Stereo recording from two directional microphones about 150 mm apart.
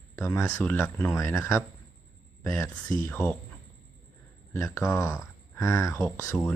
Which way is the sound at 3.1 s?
10° left (ahead or behind).